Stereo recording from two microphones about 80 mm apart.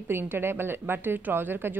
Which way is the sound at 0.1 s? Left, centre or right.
Right.